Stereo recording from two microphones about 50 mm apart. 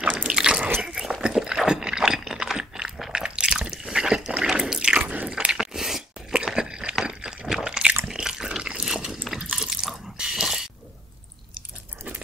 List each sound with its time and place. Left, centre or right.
0.0 s biting: right
0.8 s dog: centre
1.2 s a sound: centre
3.2 s drip: centre
5.0 s squish: right
5.3 s biting: centre
6.3 s a sound: centre
8.8 s biting: centre
9.4 s drip: centre